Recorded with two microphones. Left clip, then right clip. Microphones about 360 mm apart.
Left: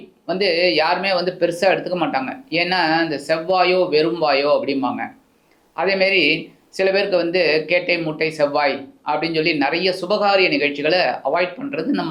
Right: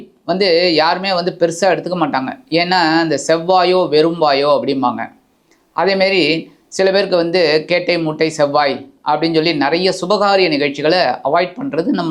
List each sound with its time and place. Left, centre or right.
0.3 s speech: right